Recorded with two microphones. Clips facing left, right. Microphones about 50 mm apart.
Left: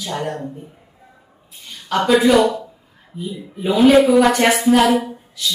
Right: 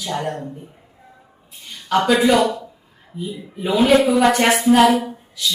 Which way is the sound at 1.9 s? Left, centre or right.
Centre.